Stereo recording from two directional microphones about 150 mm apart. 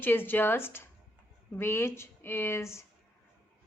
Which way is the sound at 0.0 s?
15° left (ahead or behind).